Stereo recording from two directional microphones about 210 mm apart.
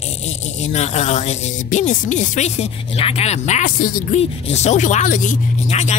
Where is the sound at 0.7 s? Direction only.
35° left (ahead or behind).